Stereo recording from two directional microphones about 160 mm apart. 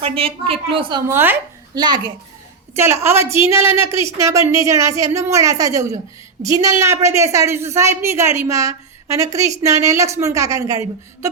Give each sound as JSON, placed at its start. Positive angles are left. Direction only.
{"t": 0.0, "sound": "a woman's voice", "side_deg": -35}
{"t": 1.1, "sound": "a woman's voice", "side_deg": -15}
{"t": 1.7, "sound": "a woman's voice", "side_deg": -25}
{"t": 2.7, "sound": "a woman's voice", "side_deg": -15}